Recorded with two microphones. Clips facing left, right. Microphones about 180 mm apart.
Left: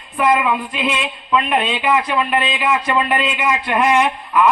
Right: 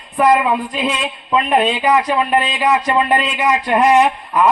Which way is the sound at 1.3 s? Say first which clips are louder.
Right 3 dB; 40° right (ahead or behind).